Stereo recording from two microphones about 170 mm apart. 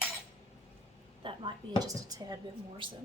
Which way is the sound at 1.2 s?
30° right (ahead or behind).